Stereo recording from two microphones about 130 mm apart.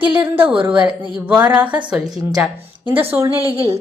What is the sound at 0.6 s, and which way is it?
A woman's voice, 10° right (ahead or behind).